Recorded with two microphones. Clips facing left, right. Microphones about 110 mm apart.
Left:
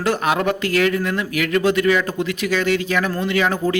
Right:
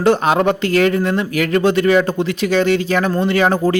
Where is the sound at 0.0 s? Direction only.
30° right (ahead or behind).